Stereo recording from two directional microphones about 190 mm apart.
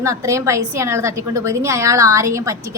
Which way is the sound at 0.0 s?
15° right (ahead or behind).